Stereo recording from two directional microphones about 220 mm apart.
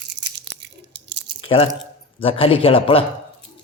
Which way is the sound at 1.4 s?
25° left (ahead or behind).